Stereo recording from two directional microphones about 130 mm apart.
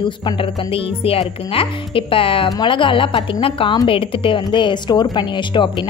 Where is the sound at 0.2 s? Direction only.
45° left (ahead or behind).